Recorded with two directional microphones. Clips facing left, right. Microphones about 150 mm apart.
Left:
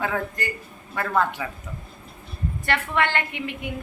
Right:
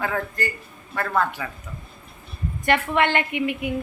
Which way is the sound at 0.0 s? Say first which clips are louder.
Right 1 dB; 20° left (ahead or behind).